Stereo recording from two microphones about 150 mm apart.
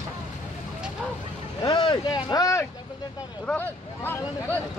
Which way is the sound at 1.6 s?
35° left (ahead or behind).